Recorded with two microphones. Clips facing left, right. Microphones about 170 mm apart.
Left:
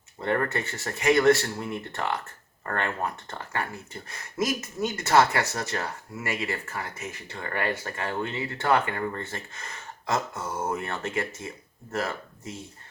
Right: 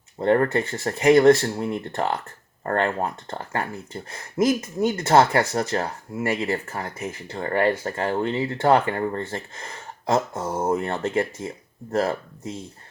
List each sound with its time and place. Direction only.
0.2 s speech: 35° right (ahead or behind)